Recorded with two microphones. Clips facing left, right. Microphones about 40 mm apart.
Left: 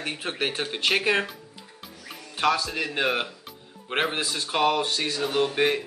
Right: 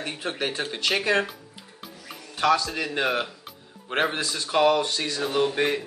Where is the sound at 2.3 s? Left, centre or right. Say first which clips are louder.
Right 2 dB; centre.